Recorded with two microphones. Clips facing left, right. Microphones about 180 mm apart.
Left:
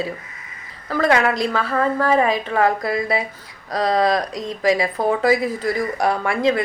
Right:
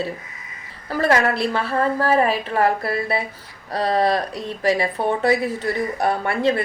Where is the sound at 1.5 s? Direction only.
30° right (ahead or behind).